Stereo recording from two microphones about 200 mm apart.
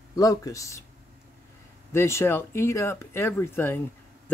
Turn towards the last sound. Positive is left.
turn(degrees=10)  # may be behind; listen again after turning